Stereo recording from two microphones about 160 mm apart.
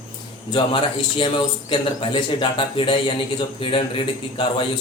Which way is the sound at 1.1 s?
30° left (ahead or behind).